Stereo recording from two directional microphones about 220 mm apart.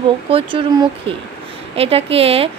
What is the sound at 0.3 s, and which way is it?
A woman's voice, 25° right (ahead or behind).